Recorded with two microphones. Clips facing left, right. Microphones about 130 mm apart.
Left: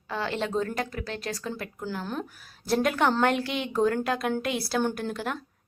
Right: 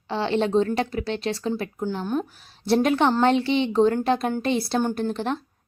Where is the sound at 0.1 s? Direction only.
25° right (ahead or behind).